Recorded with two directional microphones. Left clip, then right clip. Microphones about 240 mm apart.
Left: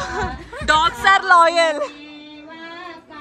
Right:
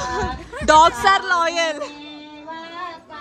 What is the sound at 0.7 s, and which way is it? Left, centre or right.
Speech, right.